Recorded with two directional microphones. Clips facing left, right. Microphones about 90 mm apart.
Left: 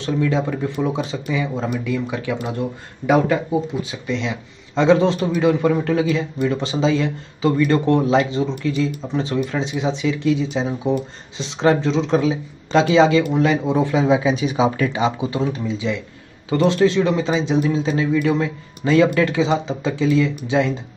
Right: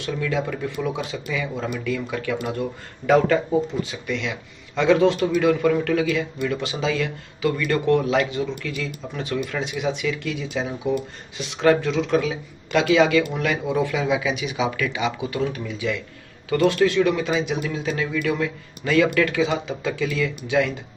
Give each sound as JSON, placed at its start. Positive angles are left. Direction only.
{"t": 0.0, "sound": "speech", "side_deg": 30}
{"t": 3.7, "sound": "speech", "side_deg": 15}
{"t": 4.1, "sound": "speech", "side_deg": 25}